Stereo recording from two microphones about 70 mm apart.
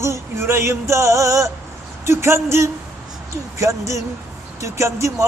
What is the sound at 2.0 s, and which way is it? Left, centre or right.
Speech, right.